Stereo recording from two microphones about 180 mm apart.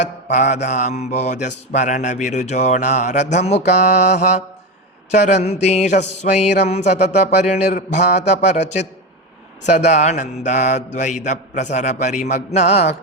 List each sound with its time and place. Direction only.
0.0 s mantra: 40° left (ahead or behind)
9.6 s mantra: 40° left (ahead or behind)